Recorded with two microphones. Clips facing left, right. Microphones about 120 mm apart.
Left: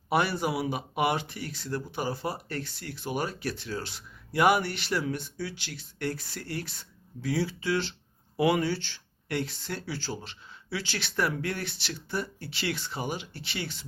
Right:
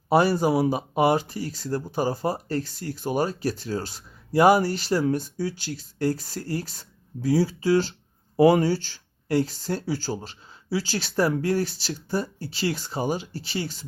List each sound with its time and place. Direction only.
0.1 s speech: 35° right (ahead or behind)